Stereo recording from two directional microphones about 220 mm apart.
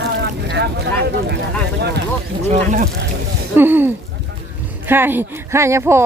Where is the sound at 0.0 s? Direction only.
50° right (ahead or behind).